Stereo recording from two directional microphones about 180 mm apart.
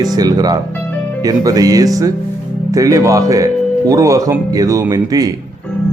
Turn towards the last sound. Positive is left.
turn(degrees=-20)  # may be behind; listen again after turning